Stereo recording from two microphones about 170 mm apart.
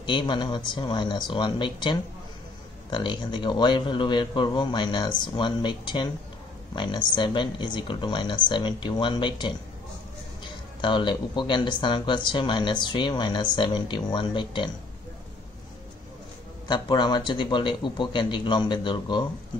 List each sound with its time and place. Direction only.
0.0 s speech: 25° left (ahead or behind)
16.6 s speech: 25° left (ahead or behind)